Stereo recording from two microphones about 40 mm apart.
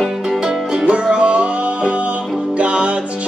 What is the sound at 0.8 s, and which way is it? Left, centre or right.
Music, right.